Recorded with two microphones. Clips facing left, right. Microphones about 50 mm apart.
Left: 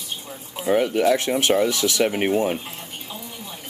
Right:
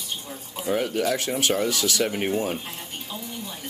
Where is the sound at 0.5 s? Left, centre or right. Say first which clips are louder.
Left 5 dB; centre.